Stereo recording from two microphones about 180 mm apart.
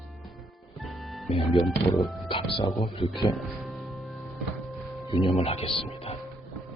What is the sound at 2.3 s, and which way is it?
Speech, 30° left (ahead or behind).